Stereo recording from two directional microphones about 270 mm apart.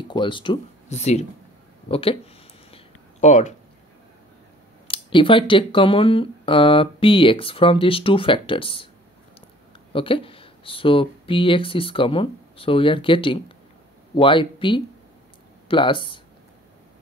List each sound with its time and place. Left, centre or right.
0.1 s speech: centre
2.7 s a sound: left
4.8 s speech: centre
9.9 s speech: centre